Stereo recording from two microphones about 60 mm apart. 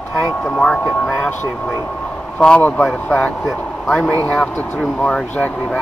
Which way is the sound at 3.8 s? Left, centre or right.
Centre.